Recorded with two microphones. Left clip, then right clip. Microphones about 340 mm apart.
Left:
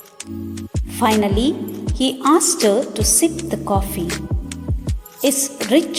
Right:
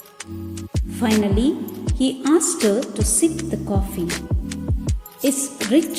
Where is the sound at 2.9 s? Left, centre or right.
Centre.